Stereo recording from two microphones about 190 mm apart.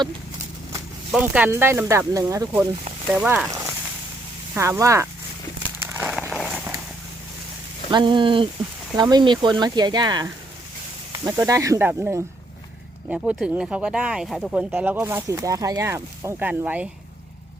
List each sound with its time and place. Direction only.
1.1 s speech: 5° right (ahead or behind)
4.5 s speech: 15° right (ahead or behind)
6.0 s a sound: centre (ahead or behind)
7.9 s speech: 25° right (ahead or behind); by 16.9 s 10° right (ahead or behind)